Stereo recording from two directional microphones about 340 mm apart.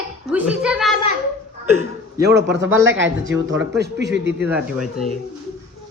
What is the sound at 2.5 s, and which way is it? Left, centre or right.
Speech, right.